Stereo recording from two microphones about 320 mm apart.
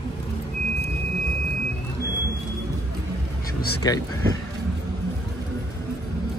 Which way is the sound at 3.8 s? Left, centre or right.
Centre.